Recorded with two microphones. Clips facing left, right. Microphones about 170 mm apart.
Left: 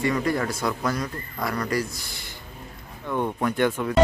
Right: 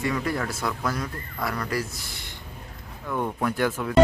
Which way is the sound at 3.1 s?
Centre (ahead or behind).